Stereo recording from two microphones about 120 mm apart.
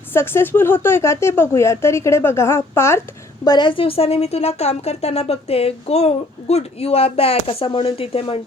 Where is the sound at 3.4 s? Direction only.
40° left (ahead or behind).